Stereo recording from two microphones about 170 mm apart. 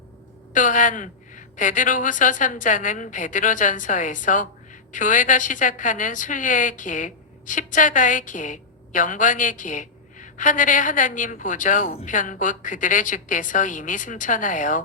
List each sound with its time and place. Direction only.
0.5 s a woman's voice: 50° left (ahead or behind)